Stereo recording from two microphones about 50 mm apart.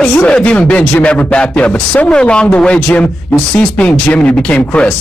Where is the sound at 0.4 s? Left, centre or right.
Left.